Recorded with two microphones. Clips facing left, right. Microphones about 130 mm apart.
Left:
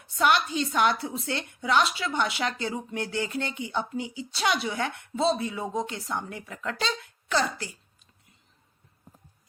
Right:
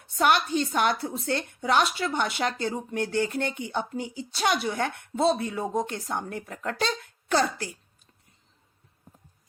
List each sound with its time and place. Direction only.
0.2 s a woman's voice: 45° right (ahead or behind)